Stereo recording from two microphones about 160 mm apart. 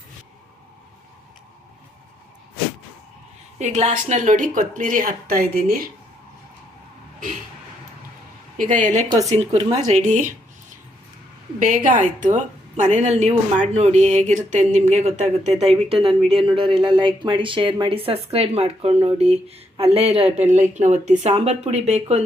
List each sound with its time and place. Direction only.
3.6 s a woman's voice: 45° right (ahead or behind); by 5.8 s 65° right (ahead or behind)
8.5 s a woman's voice: 55° right (ahead or behind)
9.3 s a woman's voice: 40° right (ahead or behind)
11.6 s a woman's voice: 60° right (ahead or behind); by 22.2 s 40° right (ahead or behind)